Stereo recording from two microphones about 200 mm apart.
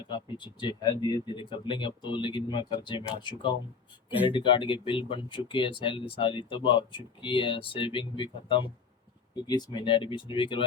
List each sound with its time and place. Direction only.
0.1 s speech: 20° left (ahead or behind)